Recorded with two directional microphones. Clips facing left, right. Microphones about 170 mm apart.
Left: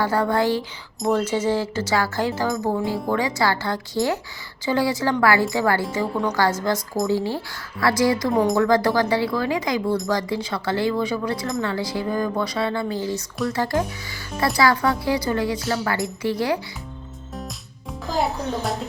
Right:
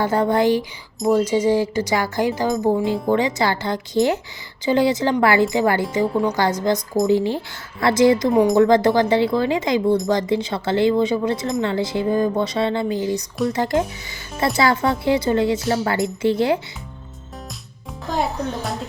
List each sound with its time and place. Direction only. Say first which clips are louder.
0.0 s speech: right 3 dB; 20° right (ahead or behind)